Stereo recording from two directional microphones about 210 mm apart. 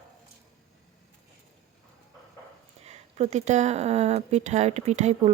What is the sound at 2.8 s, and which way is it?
Speech, 35° right (ahead or behind).